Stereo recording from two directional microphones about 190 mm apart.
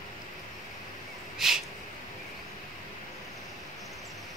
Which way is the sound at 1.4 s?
Centre (ahead or behind).